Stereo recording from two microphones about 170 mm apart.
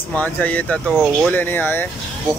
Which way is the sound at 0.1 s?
10° left (ahead or behind).